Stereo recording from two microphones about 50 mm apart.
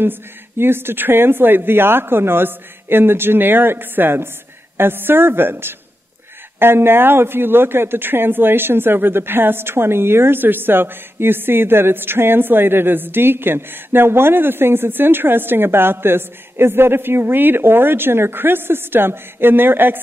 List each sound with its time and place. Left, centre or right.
0.0 s speech: right